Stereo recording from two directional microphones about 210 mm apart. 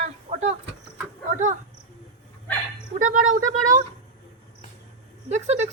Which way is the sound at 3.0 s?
35° right (ahead or behind).